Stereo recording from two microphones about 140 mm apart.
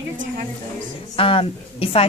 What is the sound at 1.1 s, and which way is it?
Speech, 40° left (ahead or behind).